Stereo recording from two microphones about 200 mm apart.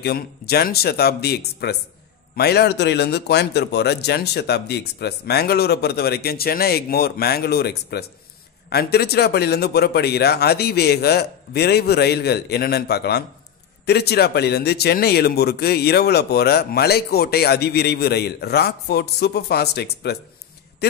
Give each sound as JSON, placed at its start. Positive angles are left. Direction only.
{"t": 0.0, "sound": "speech", "side_deg": 50}